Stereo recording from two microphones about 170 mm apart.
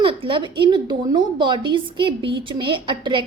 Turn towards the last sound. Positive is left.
turn(degrees=-30)  # may be behind; listen again after turning